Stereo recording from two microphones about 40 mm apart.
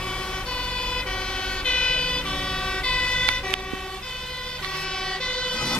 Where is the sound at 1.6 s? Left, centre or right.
Left.